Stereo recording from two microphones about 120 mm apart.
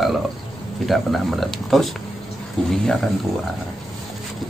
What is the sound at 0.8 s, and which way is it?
Speech, centre (ahead or behind).